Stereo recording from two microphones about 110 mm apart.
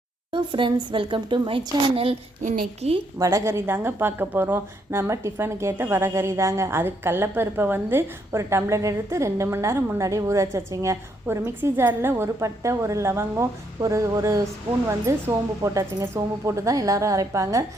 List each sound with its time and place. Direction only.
0.3 s a woman's voice: 45° right (ahead or behind)
2.0 s a woman's voice: 65° right (ahead or behind)
3.2 s a woman's voice: 30° right (ahead or behind)